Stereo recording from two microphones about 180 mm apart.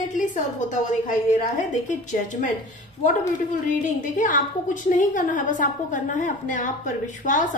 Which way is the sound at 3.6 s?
45° left (ahead or behind).